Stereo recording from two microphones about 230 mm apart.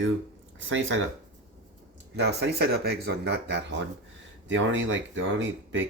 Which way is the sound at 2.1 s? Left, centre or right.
Right.